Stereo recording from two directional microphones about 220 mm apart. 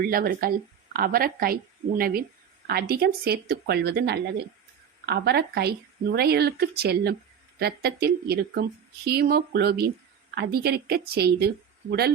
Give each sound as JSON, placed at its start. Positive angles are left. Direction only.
{"t": 0.0, "sound": "a woman's voice", "side_deg": -40}